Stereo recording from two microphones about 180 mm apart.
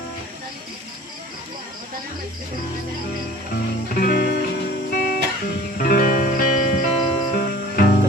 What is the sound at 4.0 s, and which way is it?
Music, 55° left (ahead or behind).